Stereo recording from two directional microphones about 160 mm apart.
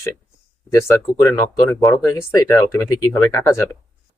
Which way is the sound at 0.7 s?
20° left (ahead or behind).